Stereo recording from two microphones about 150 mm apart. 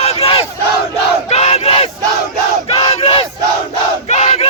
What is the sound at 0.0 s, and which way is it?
Battle cry, 45° left (ahead or behind).